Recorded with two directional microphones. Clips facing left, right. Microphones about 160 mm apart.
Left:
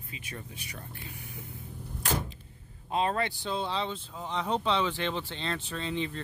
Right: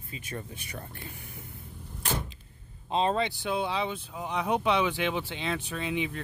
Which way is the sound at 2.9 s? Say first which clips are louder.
Right 2 dB; 25° right (ahead or behind).